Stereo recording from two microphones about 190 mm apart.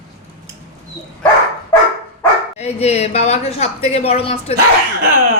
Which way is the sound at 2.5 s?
35° left (ahead or behind).